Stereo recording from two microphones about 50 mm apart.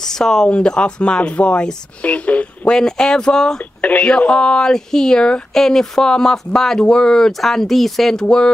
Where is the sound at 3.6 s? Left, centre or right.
Left.